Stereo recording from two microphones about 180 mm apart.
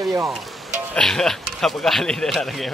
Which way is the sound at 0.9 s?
5° left (ahead or behind).